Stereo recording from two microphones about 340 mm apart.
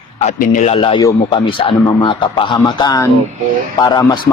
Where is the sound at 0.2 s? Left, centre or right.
Left.